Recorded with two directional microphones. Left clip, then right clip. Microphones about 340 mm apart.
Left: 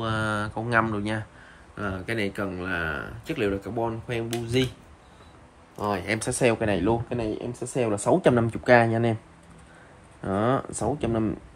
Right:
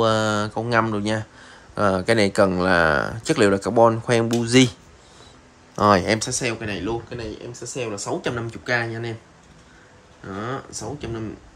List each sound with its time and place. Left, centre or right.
0.0 s speech: centre
6.1 s speech: centre
10.2 s speech: centre